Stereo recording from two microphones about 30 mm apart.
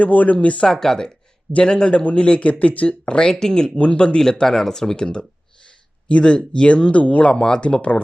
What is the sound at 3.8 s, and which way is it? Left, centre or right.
Speech, left.